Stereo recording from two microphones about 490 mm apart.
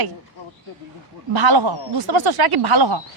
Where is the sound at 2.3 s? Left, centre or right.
Right.